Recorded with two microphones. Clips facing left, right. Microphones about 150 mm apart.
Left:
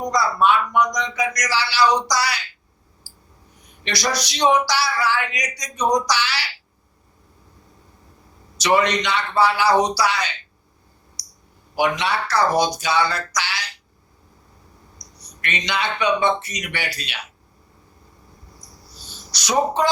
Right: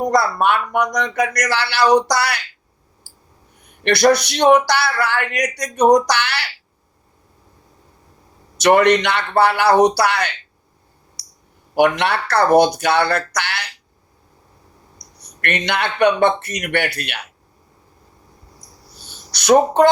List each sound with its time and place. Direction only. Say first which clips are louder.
0.0 s speech: right 3 dB; 55° right (ahead or behind)
3.7 s speech: right 11 dB; 60° right (ahead or behind)
8.5 s speech: right 6 dB; 55° right (ahead or behind)
11.7 s speech: right 5 dB; 60° right (ahead or behind)
14.9 s speech: right 1 dB; 55° right (ahead or behind)
19.3 s speech: right 7 dB; 60° right (ahead or behind)